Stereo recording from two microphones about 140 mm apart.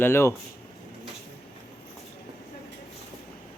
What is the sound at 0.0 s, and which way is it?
Speech, 15° left (ahead or behind).